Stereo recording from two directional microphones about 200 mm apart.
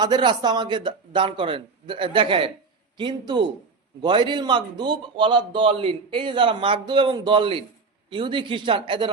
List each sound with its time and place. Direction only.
0.0 s a man's voice: 20° right (ahead or behind)